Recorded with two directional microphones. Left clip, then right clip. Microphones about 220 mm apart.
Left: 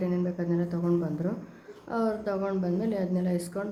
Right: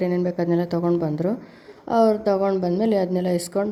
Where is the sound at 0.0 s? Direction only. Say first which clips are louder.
Right 8 dB; 35° right (ahead or behind).